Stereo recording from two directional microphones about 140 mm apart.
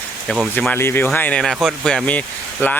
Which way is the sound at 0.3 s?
10° left (ahead or behind).